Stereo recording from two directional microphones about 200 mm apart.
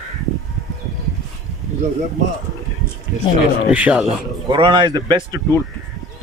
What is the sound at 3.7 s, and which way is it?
Speech, 5° right (ahead or behind).